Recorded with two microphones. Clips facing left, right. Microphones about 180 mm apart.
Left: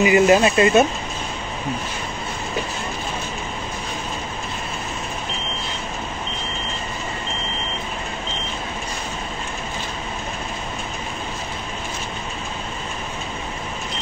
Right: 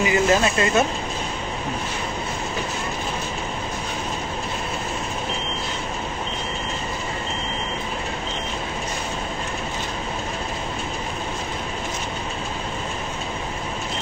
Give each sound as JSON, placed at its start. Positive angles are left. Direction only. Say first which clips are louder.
{"t": 0.0, "sound": "speech", "louder": "left 5 dB", "side_deg": 20}